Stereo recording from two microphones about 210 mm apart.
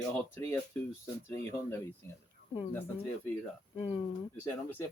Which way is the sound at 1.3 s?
10° left (ahead or behind).